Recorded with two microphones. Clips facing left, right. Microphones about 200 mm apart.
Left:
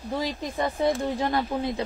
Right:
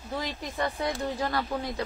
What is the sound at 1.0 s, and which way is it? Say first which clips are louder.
Speech: left 4 dB; 20° left (ahead or behind).